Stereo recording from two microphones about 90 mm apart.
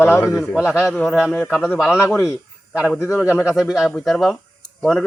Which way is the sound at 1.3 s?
20° left (ahead or behind).